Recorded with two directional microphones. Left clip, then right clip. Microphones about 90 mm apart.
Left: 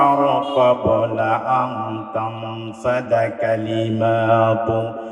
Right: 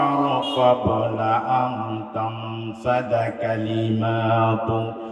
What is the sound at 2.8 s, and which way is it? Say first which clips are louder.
Mantra: left 3 dB; 40° left (ahead or behind).